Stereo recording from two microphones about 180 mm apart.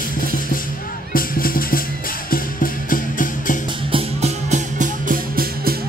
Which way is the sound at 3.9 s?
40° right (ahead or behind).